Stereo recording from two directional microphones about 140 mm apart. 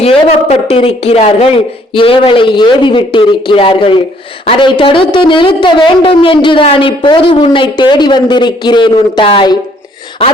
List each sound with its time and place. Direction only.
0.0 s speech: 45° left (ahead or behind)